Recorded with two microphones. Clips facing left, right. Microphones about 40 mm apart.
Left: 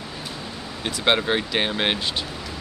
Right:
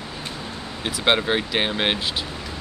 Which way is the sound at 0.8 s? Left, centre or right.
Centre.